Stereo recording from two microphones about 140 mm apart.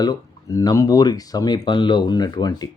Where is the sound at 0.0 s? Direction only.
25° left (ahead or behind).